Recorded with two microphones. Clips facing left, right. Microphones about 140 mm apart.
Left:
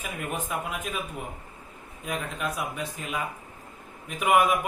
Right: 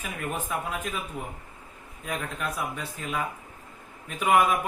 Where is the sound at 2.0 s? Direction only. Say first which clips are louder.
Left 1 dB; 10° left (ahead or behind).